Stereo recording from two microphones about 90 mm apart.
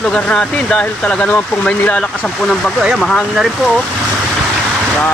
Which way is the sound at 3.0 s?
Centre (ahead or behind).